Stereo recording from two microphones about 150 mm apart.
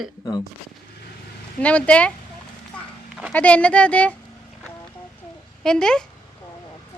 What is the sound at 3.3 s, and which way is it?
Speech, 10° left (ahead or behind).